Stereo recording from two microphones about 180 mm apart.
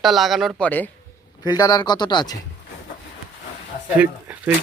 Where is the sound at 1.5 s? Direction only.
20° left (ahead or behind).